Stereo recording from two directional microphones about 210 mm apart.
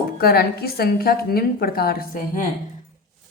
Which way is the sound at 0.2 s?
50° left (ahead or behind).